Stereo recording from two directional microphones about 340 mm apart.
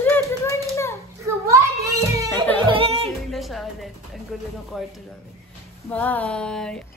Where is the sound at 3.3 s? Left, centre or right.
Centre.